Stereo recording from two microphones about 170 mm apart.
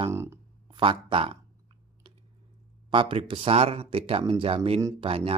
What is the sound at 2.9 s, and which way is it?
Speech, 30° right (ahead or behind).